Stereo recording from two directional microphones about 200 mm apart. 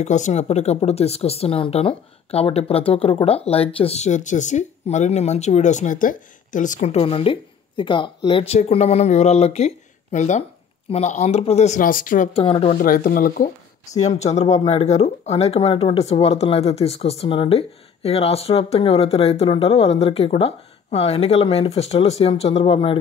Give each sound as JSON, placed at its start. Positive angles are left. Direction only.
{"t": 0.0, "sound": "speech", "side_deg": 35}
{"t": 12.4, "sound": "speech", "side_deg": 30}
{"t": 12.8, "sound": "speech", "side_deg": 45}
{"t": 13.9, "sound": "speech", "side_deg": 35}